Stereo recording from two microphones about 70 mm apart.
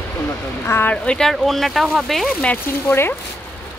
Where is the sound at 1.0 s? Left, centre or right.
Centre.